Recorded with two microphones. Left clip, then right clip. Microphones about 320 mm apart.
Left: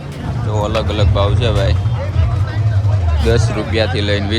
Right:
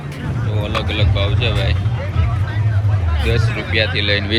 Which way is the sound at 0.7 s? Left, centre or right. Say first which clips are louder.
Left 2 dB; left.